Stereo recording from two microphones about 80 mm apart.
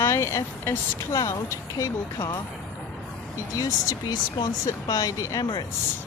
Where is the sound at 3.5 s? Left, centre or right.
Left.